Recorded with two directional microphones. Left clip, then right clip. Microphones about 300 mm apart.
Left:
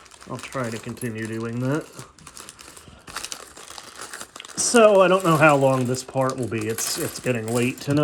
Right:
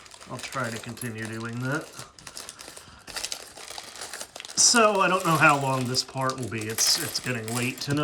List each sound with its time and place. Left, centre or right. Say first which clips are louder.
1.0 s speech: left 6 dB; right
1.4 s speech: left 4 dB; centre
3.1 s crumpling: left 1 dB; centre
4.4 s speech: left 4 dB; centre